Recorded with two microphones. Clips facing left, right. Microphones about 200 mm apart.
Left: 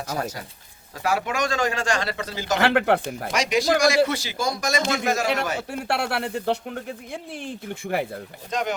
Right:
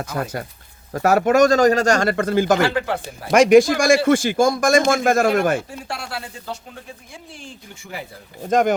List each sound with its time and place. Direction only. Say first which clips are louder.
0.0 s a man's voice: right 3 dB; 55° right (ahead or behind)
2.6 s speech: left 1 dB; 60° left (ahead or behind)
3.2 s a man's voice: right 11 dB; 55° right (ahead or behind)
5.6 s speech: left 6 dB; 65° left (ahead or behind)
8.4 s a man's voice: right 10 dB; 50° right (ahead or behind)